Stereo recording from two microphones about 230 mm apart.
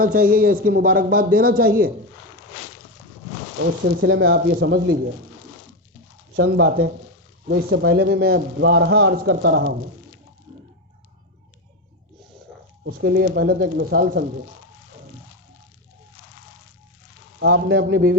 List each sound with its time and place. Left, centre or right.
0.0 s a man's voice: right
3.8 s a man's voice: right
6.3 s a man's voice: right
12.8 s a man's voice: right
17.4 s a man's voice: right